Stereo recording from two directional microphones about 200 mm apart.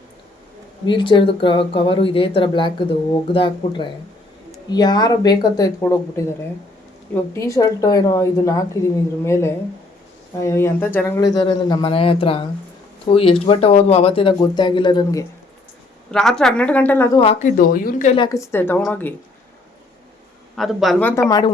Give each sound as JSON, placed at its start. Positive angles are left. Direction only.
{"t": 0.9, "sound": "speech", "side_deg": 25}
{"t": 16.1, "sound": "a woman's voice", "side_deg": 5}
{"t": 17.2, "sound": "speech", "side_deg": 30}
{"t": 17.6, "sound": "speech", "side_deg": 45}
{"t": 18.1, "sound": "speech", "side_deg": 20}
{"t": 20.6, "sound": "a woman's voice", "side_deg": 0}
{"t": 21.2, "sound": "speech", "side_deg": 20}